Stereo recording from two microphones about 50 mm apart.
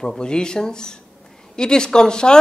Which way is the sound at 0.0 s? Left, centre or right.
Centre.